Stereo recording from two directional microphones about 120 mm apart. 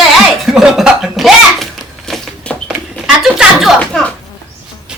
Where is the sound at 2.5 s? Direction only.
10° left (ahead or behind).